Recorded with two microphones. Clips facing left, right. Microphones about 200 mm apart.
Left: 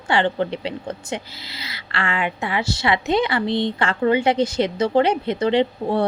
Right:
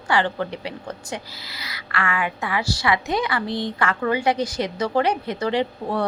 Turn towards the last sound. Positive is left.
turn(degrees=25)  # may be behind; listen again after turning